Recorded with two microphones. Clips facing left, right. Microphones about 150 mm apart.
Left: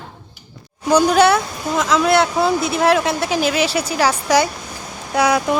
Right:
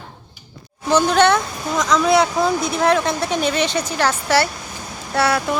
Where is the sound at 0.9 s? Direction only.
10° left (ahead or behind).